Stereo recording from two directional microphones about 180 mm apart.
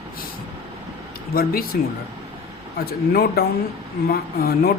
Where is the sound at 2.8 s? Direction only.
60° left (ahead or behind).